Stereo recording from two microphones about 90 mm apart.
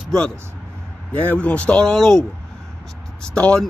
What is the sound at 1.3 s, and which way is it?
Speech, 15° left (ahead or behind).